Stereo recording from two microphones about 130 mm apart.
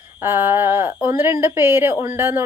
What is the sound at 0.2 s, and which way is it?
Speech, 15° right (ahead or behind).